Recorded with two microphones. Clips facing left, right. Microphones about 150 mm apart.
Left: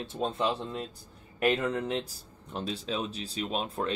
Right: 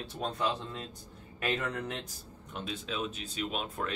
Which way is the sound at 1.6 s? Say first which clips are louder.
Left 5 dB; 25° left (ahead or behind).